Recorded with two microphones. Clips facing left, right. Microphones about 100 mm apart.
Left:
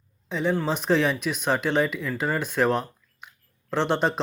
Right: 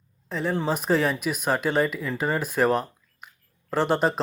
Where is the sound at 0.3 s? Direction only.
Centre (ahead or behind).